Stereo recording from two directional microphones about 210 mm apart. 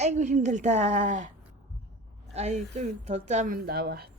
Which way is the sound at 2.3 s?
30° right (ahead or behind).